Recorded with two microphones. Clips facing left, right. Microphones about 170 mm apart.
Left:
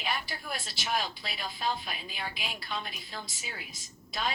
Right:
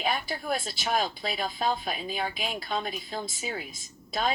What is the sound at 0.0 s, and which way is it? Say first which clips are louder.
Speech: right 6 dB; 45° right (ahead or behind).